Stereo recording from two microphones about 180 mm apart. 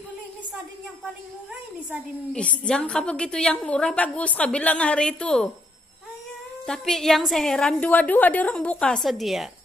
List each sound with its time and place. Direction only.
2.3 s a woman's voice: 5° left (ahead or behind)
6.6 s a woman's voice: 5° left (ahead or behind)